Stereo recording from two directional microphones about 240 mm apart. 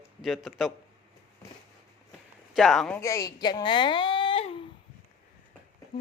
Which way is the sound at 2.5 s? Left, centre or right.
Centre.